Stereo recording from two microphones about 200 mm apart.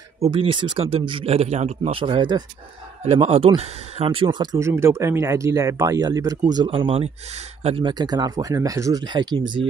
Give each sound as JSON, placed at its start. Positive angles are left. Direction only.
{"t": 0.2, "sound": "speech", "side_deg": -30}